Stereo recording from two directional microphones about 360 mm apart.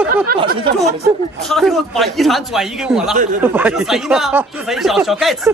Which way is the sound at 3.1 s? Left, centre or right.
Right.